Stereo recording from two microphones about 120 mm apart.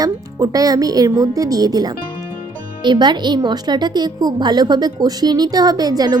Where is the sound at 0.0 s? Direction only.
30° right (ahead or behind).